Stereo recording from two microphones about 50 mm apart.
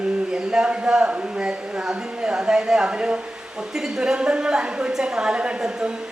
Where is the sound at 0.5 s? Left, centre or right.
Right.